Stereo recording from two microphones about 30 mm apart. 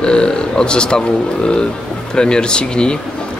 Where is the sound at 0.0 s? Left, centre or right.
Left.